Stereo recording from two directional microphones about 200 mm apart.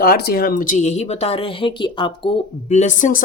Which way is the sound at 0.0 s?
50° left (ahead or behind).